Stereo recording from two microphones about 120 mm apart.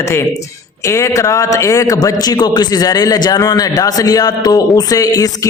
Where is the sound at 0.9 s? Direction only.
25° left (ahead or behind).